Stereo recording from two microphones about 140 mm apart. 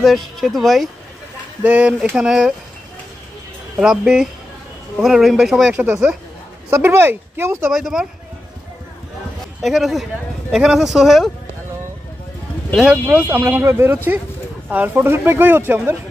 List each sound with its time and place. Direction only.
0.0 s speech: centre (ahead or behind)
3.7 s speech: 5° right (ahead or behind)
6.7 s speech: 15° right (ahead or behind)
7.7 s speech: 5° right (ahead or behind)
9.6 s speech: centre (ahead or behind)
12.9 s speech: 15° right (ahead or behind)